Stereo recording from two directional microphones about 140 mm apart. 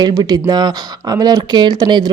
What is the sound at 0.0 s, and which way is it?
Speech, 30° right (ahead or behind).